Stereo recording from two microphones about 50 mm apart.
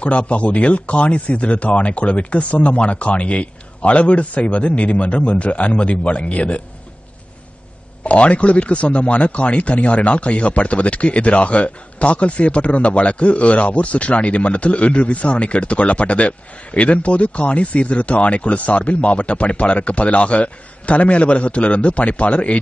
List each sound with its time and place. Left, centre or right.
0.0 s a man's voice: left
8.0 s a man's voice: left